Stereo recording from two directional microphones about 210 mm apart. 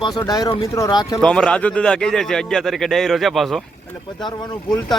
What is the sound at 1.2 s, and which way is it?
A man's voice, 5° left (ahead or behind).